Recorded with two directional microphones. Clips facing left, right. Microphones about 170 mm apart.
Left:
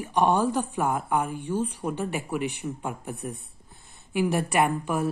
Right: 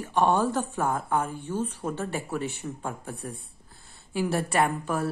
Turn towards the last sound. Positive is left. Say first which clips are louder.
# left 1 dB
turn(degrees=15)  # may be behind; listen again after turning